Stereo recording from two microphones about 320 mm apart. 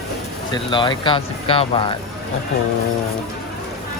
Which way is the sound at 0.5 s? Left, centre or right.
Centre.